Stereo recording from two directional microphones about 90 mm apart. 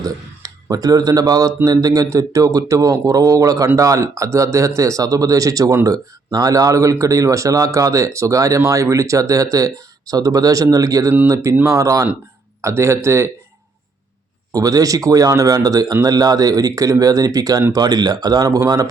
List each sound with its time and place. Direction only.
0.0 s a man's voice: 40° right (ahead or behind)
14.5 s speech: 40° right (ahead or behind)